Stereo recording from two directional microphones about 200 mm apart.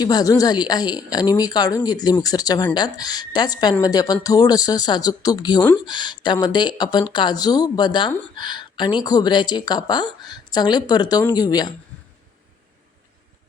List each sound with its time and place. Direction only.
0.0 s speech: 20° left (ahead or behind)